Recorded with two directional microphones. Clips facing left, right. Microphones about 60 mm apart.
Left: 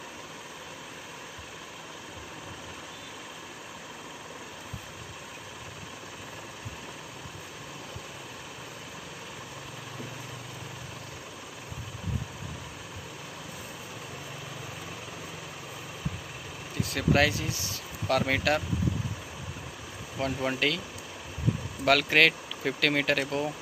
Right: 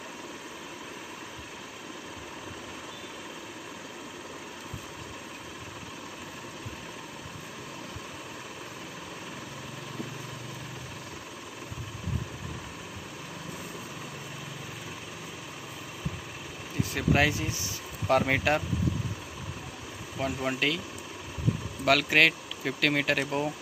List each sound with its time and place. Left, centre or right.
16.9 s speech: centre
20.2 s speech: centre
21.8 s speech: centre